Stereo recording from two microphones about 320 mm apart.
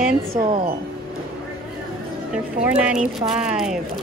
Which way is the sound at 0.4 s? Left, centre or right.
Centre.